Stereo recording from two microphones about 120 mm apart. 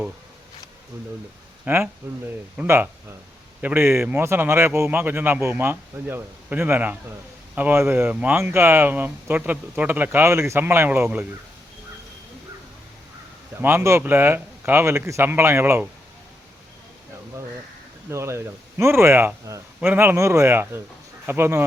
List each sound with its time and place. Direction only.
1.6 s speech: 20° right (ahead or behind)
13.6 s speech: 20° right (ahead or behind)
18.1 s speech: 25° right (ahead or behind)